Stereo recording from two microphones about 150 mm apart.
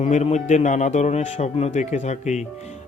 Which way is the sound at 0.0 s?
45° left (ahead or behind).